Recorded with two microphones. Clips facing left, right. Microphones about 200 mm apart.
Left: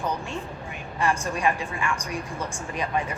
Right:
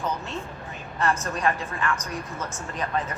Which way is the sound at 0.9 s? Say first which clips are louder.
Even; 15° left (ahead or behind).